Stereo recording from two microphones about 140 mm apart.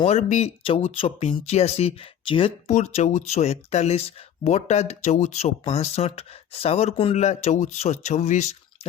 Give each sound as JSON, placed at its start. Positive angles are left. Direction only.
{"t": 0.0, "sound": "speech", "side_deg": 50}
{"t": 2.6, "sound": "speech", "side_deg": 55}
{"t": 7.2, "sound": "speech", "side_deg": 55}